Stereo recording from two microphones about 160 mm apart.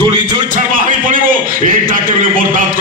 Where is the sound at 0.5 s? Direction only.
55° right (ahead or behind).